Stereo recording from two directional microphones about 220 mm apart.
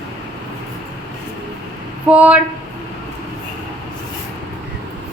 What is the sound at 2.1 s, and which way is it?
Speech, 5° right (ahead or behind).